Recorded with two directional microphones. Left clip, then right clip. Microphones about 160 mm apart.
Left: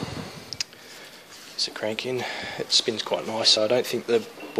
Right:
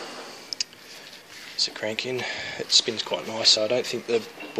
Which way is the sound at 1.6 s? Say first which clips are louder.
Right 1 dB; 5° left (ahead or behind).